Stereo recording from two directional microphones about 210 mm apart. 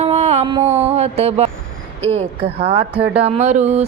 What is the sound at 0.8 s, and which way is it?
Speech, 30° right (ahead or behind).